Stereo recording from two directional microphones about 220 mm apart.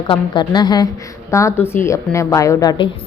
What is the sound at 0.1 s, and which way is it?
A woman's voice, 20° left (ahead or behind).